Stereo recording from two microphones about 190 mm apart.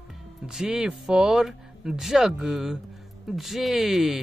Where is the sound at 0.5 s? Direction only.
5° right (ahead or behind).